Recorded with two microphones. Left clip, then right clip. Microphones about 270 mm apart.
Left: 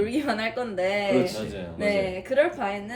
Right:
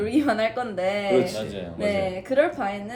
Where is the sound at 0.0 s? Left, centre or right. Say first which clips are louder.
Right 4 dB; centre.